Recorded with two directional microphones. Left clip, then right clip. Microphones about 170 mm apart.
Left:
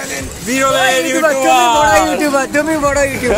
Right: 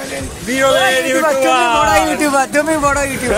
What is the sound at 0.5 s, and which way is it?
A man's voice, 20° left (ahead or behind).